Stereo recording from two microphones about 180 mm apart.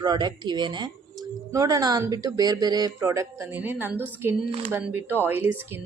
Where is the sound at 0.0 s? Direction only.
25° right (ahead or behind).